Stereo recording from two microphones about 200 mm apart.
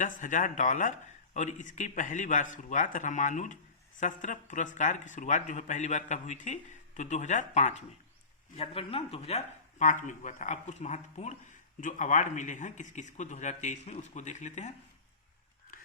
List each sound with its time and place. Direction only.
0.0 s speech: 40° left (ahead or behind)